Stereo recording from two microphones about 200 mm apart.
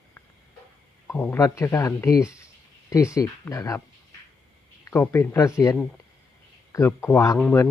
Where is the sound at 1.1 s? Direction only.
10° left (ahead or behind).